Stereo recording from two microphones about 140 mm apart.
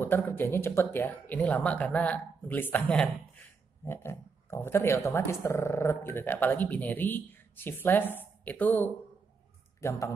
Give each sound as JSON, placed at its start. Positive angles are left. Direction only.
{"t": 0.0, "sound": "a man's voice", "side_deg": 15}